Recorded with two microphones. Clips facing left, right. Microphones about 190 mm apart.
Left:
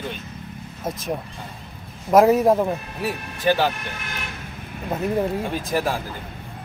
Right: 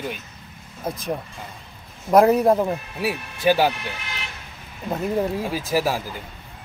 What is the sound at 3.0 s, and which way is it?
Speech, 10° right (ahead or behind).